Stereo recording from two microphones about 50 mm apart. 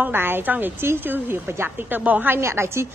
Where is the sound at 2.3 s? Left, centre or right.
Right.